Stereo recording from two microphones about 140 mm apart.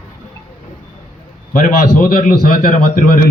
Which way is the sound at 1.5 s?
70° left (ahead or behind).